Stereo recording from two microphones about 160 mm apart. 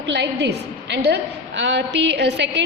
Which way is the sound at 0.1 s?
90° right.